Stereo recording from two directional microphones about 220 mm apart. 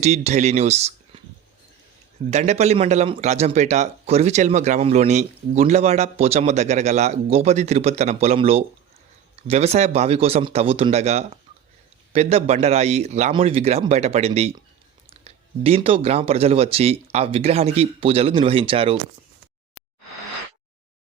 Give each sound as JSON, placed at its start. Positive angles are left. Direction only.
{"t": 0.0, "sound": "speech", "side_deg": -30}
{"t": 2.3, "sound": "a man's voice", "side_deg": -30}